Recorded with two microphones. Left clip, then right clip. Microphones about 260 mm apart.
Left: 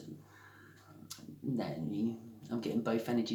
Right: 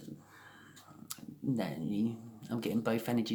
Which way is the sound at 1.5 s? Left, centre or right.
Right.